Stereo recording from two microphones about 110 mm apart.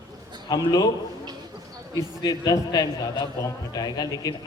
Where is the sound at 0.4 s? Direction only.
35° left (ahead or behind).